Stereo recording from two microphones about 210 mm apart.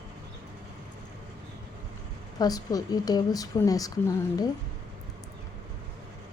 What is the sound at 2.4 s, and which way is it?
Speech, 15° left (ahead or behind).